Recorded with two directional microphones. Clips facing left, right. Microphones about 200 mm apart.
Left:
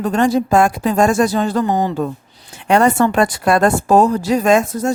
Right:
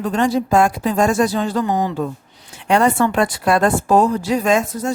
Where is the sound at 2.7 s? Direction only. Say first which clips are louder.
Left 2 dB; 50° left (ahead or behind).